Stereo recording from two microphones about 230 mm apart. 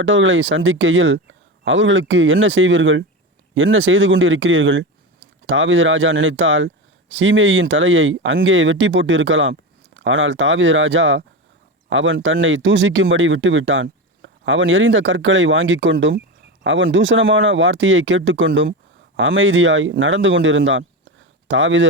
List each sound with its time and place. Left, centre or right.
0.0 s speech: right